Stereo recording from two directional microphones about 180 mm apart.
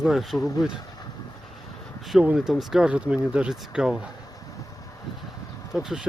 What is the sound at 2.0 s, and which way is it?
Speech, centre (ahead or behind).